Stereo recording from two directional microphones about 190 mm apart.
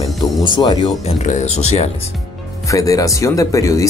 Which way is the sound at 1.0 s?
35° left (ahead or behind).